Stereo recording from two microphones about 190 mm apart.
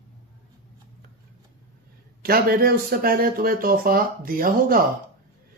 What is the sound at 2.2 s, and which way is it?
Speech, 50° right (ahead or behind).